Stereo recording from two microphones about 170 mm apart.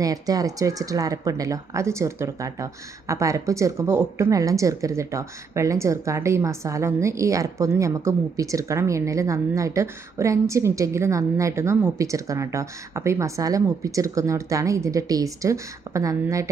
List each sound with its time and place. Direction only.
0.0 s speech: 20° right (ahead or behind)